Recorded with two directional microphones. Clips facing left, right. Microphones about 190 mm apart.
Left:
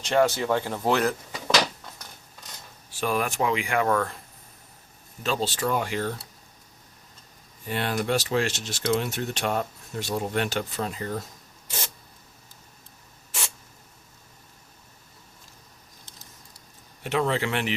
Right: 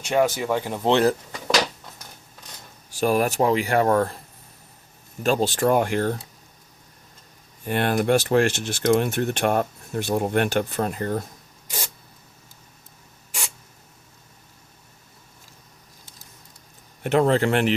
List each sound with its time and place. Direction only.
0.0 s speech: 15° right (ahead or behind)
2.9 s speech: 45° right (ahead or behind)
5.2 s speech: 50° right (ahead or behind)
7.6 s speech: 55° right (ahead or behind)
17.0 s speech: 50° right (ahead or behind)